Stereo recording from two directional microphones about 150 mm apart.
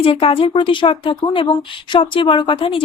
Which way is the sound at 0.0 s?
40° left (ahead or behind).